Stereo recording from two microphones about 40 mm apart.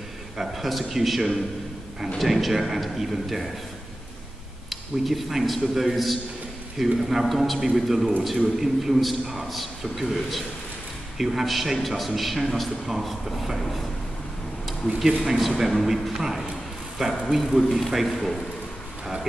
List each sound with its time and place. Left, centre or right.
0.4 s a man's voice: centre
4.6 s a man's voice: centre
15.2 s a man's voice: centre